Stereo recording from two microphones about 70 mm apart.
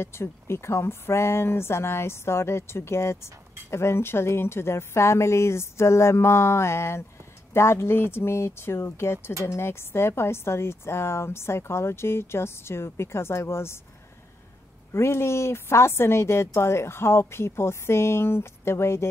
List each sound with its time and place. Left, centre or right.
0.0 s speech: left
14.9 s speech: left